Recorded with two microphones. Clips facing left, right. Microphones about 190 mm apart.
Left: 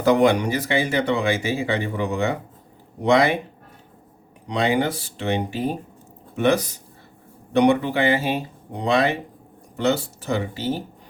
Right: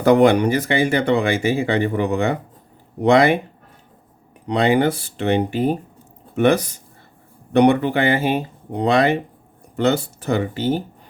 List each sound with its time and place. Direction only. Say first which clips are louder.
0.0 s speech: right 4 dB; 55° right (ahead or behind)
4.4 s speech: right 4 dB; 60° right (ahead or behind)